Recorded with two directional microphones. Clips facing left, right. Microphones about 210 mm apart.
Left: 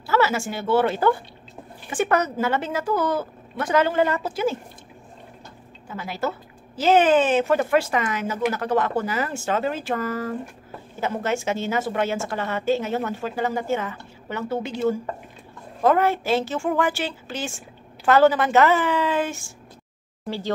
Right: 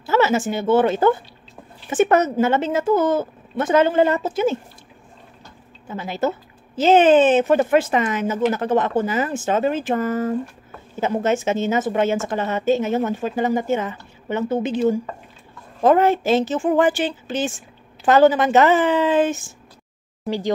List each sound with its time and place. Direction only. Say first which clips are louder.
0.0 s a woman's voice: right 4 dB; 20° right (ahead or behind)
5.9 s a woman's voice: right 5 dB; 25° right (ahead or behind)